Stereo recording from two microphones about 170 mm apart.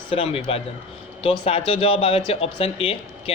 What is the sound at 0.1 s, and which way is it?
Speech, 30° left (ahead or behind).